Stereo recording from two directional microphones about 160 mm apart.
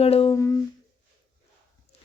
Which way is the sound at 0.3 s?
20° left (ahead or behind).